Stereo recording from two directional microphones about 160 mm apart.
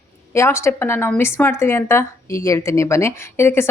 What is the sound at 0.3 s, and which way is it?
Speech, 15° left (ahead or behind).